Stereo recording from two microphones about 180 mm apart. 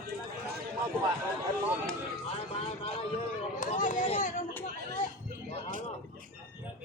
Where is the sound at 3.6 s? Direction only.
45° left (ahead or behind).